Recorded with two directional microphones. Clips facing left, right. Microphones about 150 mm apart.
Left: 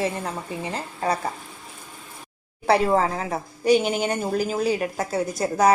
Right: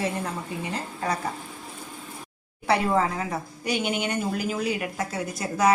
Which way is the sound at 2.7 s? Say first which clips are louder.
Left 3 dB; 35° left (ahead or behind).